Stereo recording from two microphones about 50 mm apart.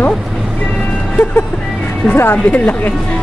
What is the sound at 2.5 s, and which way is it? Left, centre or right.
Speech, left.